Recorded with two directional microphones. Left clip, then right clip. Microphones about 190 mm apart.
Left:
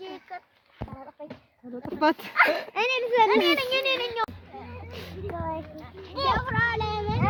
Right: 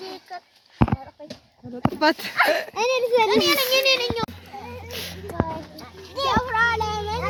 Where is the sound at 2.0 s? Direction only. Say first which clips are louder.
Right 3 dB; 5° right (ahead or behind).